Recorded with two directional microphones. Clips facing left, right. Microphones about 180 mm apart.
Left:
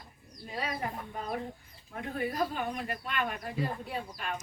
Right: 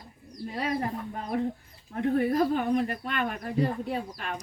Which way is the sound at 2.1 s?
50° right (ahead or behind).